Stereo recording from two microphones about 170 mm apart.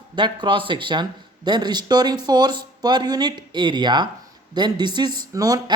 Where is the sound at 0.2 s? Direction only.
30° right (ahead or behind).